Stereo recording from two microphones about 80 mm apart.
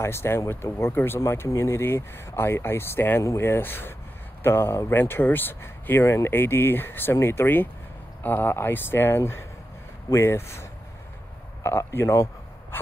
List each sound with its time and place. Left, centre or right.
0.0 s speech: left